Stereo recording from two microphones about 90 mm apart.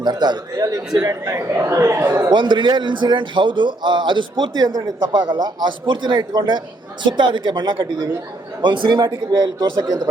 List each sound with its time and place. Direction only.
0.0 s a man's voice: 50° right (ahead or behind); by 2.3 s 25° right (ahead or behind)
2.3 s a man's voice: 60° right (ahead or behind)